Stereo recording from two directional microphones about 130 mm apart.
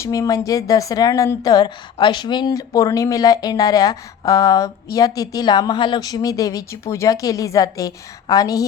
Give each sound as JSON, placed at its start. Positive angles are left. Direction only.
{"t": 0.0, "sound": "speech", "side_deg": 25}